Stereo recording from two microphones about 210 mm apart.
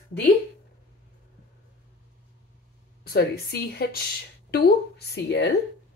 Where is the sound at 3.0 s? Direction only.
50° left (ahead or behind).